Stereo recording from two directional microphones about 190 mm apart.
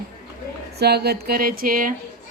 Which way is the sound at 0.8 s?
60° right (ahead or behind).